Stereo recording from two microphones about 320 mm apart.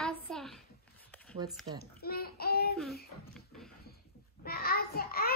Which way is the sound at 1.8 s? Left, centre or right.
Left.